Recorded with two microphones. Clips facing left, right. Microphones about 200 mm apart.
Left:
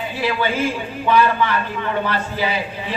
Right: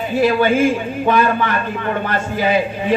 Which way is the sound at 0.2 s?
45° right (ahead or behind).